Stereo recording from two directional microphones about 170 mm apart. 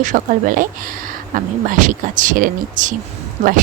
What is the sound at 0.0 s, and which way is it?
Speech, 50° right (ahead or behind).